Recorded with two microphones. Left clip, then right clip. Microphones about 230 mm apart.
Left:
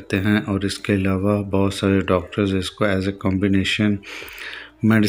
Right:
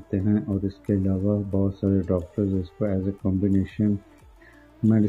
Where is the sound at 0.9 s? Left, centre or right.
Centre.